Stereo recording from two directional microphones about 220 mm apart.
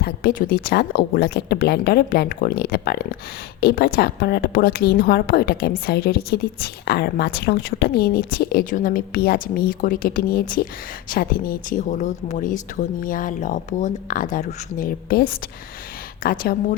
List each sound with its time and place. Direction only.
0.0 s a woman's voice: 45° left (ahead or behind)